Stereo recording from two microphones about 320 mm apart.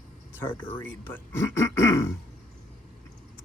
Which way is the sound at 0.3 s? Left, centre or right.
Centre.